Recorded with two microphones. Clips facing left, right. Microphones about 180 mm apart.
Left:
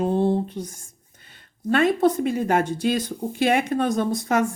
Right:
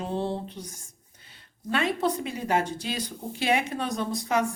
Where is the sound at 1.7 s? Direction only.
50° left (ahead or behind).